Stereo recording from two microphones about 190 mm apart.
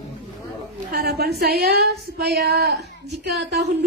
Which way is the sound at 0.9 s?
55° right (ahead or behind).